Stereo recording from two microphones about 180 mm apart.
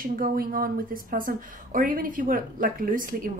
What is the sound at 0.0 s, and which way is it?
Speech, 50° right (ahead or behind).